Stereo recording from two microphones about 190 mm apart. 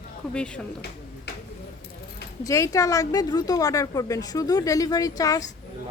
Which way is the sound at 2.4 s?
15° left (ahead or behind).